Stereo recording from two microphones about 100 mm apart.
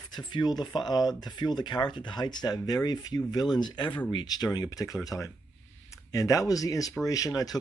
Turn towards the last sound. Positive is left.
turn(degrees=40)  # may be behind; listen again after turning